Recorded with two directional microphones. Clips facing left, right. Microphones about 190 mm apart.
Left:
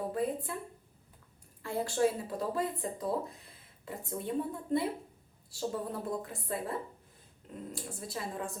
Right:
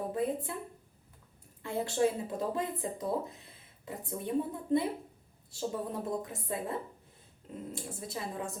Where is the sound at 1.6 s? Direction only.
20° right (ahead or behind).